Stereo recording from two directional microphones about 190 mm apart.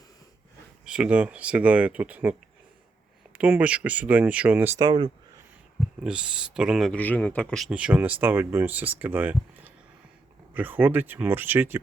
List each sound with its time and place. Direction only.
0.9 s speech: 5° right (ahead or behind)
3.3 s speech: 10° right (ahead or behind)
4.8 s speech: 25° right (ahead or behind)
6.0 s speech: 5° right (ahead or behind)